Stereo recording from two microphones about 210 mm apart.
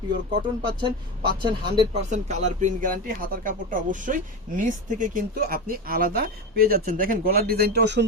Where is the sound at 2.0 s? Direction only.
35° right (ahead or behind).